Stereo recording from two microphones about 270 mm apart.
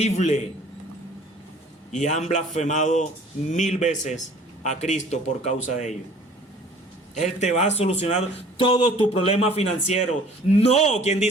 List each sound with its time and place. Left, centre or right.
0.0 s a man's voice: left
1.9 s a man's voice: left
7.2 s a man's voice: left